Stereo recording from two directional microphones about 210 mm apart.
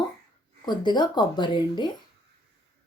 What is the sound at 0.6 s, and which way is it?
Speech, 20° left (ahead or behind).